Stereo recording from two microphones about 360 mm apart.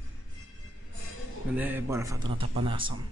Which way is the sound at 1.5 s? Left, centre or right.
Centre.